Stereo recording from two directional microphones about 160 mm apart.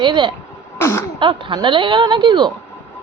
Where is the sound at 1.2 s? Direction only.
30° right (ahead or behind).